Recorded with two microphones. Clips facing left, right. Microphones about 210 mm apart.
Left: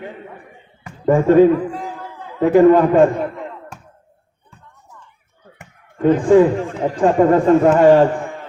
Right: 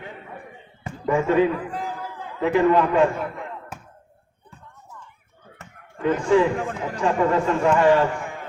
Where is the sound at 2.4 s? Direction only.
45° left (ahead or behind).